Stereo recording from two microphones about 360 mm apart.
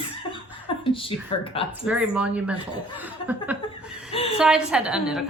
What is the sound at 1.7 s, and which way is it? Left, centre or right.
A woman's voice, centre.